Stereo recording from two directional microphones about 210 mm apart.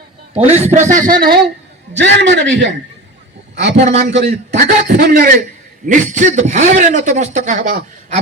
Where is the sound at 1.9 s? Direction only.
55° right (ahead or behind).